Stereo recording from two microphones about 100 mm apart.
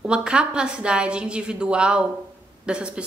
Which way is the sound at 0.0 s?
10° right (ahead or behind).